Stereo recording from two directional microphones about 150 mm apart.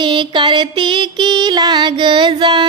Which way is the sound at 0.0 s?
30° right (ahead or behind).